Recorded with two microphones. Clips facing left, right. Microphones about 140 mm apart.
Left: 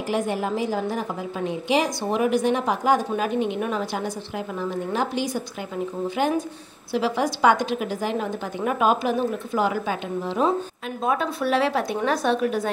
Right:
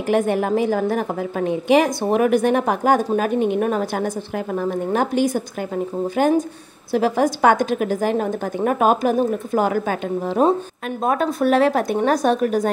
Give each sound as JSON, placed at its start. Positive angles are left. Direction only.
{"t": 0.1, "sound": "a woman's voice", "side_deg": -55}